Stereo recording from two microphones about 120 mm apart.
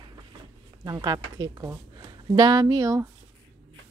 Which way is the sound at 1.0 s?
35° right (ahead or behind).